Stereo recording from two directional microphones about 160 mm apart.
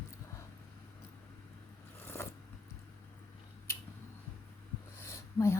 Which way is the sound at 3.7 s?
15° left (ahead or behind).